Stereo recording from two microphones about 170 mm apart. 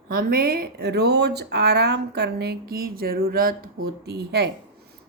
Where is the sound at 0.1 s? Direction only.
65° right (ahead or behind).